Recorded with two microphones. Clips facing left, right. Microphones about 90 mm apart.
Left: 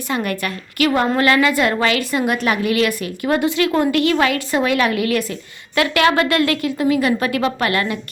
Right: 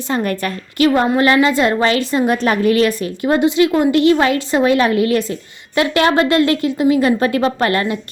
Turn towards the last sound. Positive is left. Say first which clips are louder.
# right 3 dB
turn(degrees=-30)  # may be behind; listen again after turning